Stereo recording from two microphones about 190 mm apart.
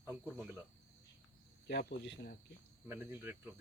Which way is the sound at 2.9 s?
10° right (ahead or behind).